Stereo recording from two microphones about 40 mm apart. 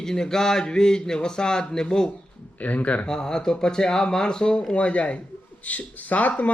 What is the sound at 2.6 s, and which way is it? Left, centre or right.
Speech, left.